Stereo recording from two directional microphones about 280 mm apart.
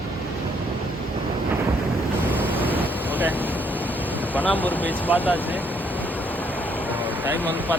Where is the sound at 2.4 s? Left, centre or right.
Centre.